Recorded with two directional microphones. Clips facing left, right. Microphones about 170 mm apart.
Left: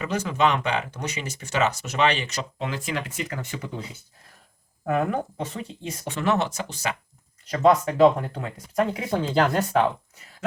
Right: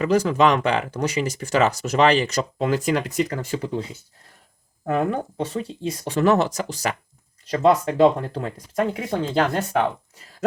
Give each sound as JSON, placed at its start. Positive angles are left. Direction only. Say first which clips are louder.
{"t": 0.0, "sound": "speech", "louder": "right 6 dB", "side_deg": -35}
{"t": 4.9, "sound": "speech", "louder": "right 2 dB", "side_deg": -30}